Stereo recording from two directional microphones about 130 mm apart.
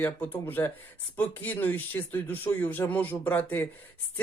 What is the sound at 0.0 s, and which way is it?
Speech, 15° left (ahead or behind).